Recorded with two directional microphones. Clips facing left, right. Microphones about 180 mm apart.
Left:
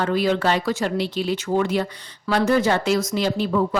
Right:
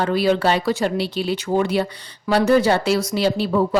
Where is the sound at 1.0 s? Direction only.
70° right (ahead or behind).